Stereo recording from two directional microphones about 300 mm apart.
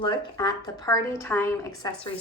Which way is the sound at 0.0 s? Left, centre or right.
Centre.